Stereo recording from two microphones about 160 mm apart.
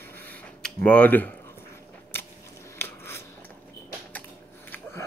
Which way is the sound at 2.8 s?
15° left (ahead or behind).